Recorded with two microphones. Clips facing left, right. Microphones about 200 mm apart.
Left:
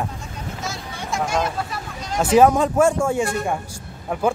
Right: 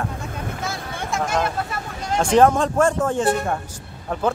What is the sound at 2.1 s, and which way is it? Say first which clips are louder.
Speech: left 1 dB; 5° left (ahead or behind).